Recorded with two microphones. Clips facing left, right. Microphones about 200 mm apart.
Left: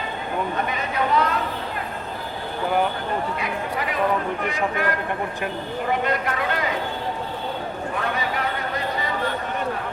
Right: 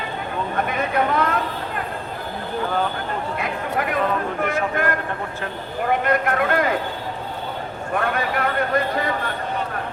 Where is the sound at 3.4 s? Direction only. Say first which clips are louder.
Right 2 dB; 50° right (ahead or behind).